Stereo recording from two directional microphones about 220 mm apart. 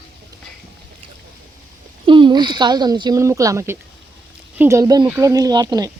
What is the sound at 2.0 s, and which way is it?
Speech, 20° right (ahead or behind).